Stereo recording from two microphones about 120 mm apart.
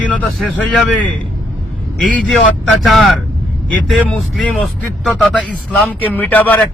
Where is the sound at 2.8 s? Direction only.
Centre (ahead or behind).